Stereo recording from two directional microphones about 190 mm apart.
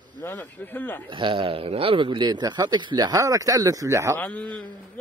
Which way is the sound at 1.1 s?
25° right (ahead or behind).